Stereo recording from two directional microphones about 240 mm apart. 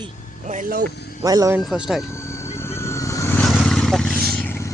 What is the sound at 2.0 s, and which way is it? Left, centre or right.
Vehicle, centre.